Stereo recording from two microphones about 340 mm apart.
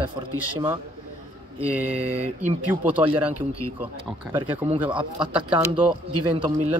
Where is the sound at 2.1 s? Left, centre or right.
Centre.